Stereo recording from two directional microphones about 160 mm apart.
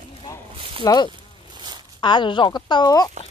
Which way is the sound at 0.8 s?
25° left (ahead or behind).